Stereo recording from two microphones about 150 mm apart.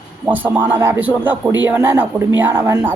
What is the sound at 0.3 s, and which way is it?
A woman's voice, 10° right (ahead or behind).